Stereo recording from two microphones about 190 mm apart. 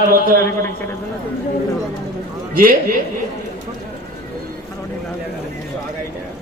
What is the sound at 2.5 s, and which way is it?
Speech, 50° right (ahead or behind).